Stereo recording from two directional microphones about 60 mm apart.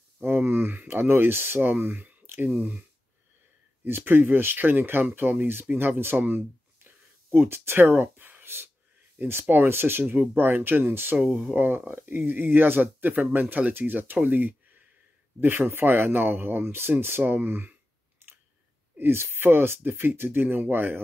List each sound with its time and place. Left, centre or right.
0.2 s speech: right
3.8 s speech: right
18.2 s a sound: right
18.9 s speech: right